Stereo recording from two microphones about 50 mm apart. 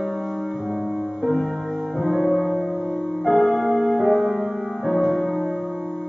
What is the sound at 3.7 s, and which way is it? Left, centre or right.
Music, centre.